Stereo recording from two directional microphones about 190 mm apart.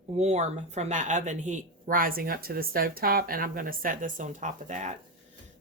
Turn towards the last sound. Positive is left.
turn(degrees=-40)  # may be behind; listen again after turning